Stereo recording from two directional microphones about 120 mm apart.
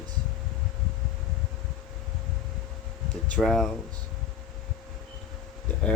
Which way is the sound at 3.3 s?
5° left (ahead or behind).